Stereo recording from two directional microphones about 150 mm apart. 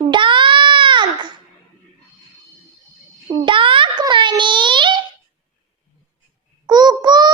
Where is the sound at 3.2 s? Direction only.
35° right (ahead or behind).